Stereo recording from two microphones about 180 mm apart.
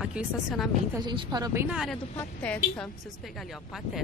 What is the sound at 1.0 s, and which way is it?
Speech, 25° right (ahead or behind).